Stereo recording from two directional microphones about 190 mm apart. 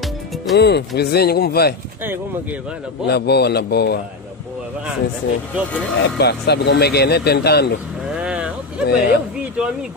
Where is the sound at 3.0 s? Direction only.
60° left (ahead or behind).